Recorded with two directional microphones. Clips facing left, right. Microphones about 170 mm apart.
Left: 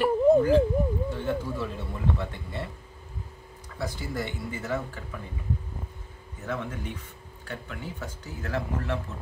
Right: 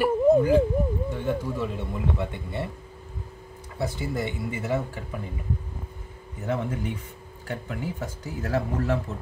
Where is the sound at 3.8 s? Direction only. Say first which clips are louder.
Right 4 dB; 20° right (ahead or behind).